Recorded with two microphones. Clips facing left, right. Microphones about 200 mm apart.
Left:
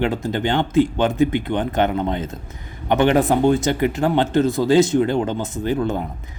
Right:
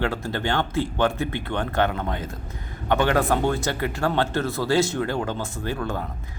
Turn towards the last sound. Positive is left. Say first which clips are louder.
# left 7 dB
turn(degrees=20)  # may be behind; listen again after turning